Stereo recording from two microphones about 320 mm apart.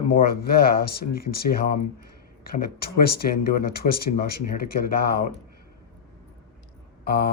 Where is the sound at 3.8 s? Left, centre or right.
Left.